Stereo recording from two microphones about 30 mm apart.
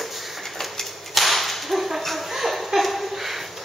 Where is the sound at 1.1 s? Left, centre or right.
Centre.